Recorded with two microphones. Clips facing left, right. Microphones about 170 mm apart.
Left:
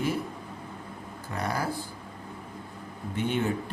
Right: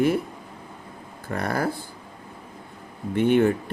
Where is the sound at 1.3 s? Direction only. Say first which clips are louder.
Right 5 dB; 55° right (ahead or behind).